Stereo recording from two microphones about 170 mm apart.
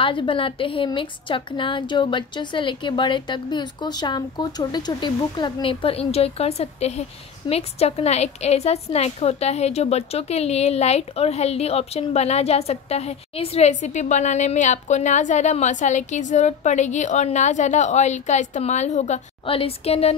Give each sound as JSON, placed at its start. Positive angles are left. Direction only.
{"t": 0.0, "sound": "a woman's voice", "side_deg": 30}